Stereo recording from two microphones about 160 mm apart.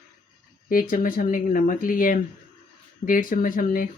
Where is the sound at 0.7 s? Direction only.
60° left (ahead or behind).